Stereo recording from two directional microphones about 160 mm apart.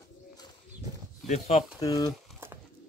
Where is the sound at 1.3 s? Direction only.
40° left (ahead or behind).